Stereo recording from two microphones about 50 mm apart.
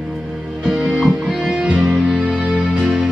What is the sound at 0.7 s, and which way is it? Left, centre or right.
Music, centre.